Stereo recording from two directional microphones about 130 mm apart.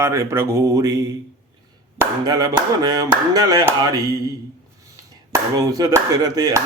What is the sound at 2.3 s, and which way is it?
Speech, 30° right (ahead or behind).